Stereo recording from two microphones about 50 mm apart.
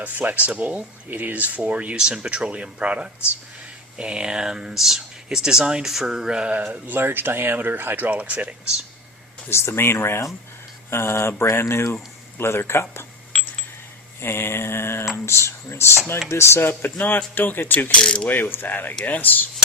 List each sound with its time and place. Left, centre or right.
0.0 s speech: right
9.5 s speech: left
13.3 s a sound: centre
14.2 s mantra: left
15.3 s speech: left
16.6 s speech: left
17.3 s mechanisms: left
17.9 s mechanisms: centre
18.3 s mechanisms: left